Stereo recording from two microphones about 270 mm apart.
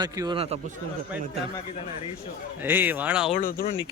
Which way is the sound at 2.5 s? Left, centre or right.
Centre.